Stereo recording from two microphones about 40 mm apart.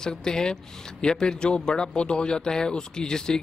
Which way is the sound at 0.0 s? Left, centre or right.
Centre.